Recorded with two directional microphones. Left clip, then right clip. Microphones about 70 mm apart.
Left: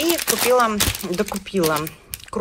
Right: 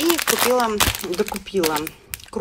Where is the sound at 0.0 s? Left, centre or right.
Right.